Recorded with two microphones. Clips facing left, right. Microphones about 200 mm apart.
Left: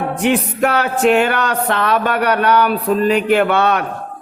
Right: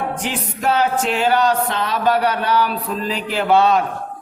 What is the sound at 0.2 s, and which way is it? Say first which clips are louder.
Speech: left 9 dB; 65° left (ahead or behind).